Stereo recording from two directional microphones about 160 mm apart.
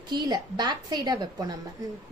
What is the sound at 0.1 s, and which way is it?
A woman's voice, 25° right (ahead or behind).